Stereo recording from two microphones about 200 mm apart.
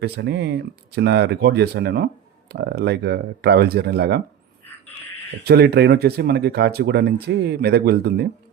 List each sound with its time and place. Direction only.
0.0 s speech: 60° right (ahead or behind)
5.5 s speech: 55° right (ahead or behind)